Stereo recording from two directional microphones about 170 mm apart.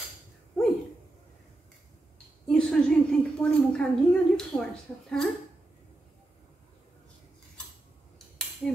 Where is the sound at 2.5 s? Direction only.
5° left (ahead or behind).